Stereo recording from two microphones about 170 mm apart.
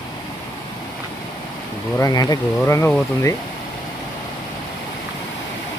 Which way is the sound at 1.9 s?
20° left (ahead or behind).